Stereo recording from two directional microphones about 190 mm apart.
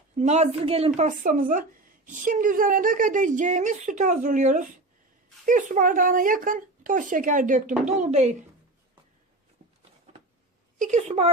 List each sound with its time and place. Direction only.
0.2 s a woman's voice: 35° right (ahead or behind)
9.6 s a sound: 45° right (ahead or behind)
10.8 s a woman's voice: 40° right (ahead or behind)